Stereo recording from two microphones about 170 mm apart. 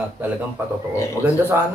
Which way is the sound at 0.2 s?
10° right (ahead or behind).